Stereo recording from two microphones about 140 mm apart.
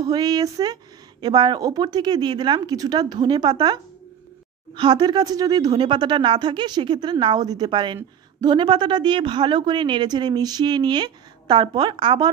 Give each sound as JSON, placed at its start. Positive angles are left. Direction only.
{"t": 0.0, "sound": "speech", "side_deg": -30}